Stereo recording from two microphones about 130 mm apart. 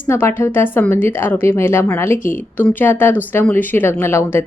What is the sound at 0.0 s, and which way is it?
A woman's voice, 20° left (ahead or behind).